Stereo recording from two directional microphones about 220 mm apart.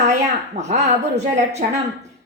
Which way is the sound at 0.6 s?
30° right (ahead or behind).